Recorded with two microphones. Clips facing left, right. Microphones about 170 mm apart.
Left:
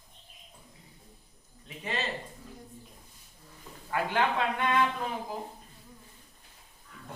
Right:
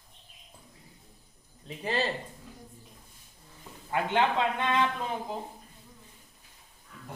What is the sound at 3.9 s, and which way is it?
Speech, 25° right (ahead or behind).